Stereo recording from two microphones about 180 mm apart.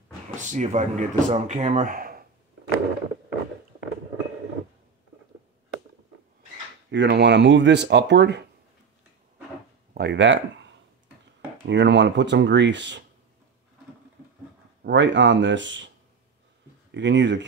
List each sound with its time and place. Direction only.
0.4 s speech: 40° right (ahead or behind)
6.9 s speech: 75° right (ahead or behind)
9.9 s speech: 75° right (ahead or behind)
11.6 s speech: 75° right (ahead or behind)
14.8 s speech: 80° right
16.9 s speech: 85° right